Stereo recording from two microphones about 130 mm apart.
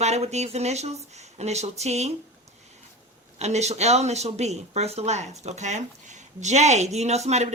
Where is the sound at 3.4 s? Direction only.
60° right (ahead or behind).